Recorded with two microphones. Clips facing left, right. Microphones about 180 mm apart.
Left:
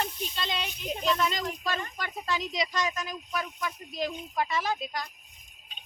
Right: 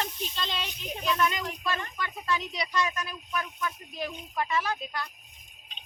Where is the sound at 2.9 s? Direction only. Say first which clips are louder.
Left 1 dB; 20° left (ahead or behind).